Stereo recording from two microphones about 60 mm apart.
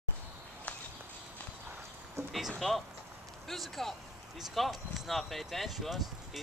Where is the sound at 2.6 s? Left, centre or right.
Centre.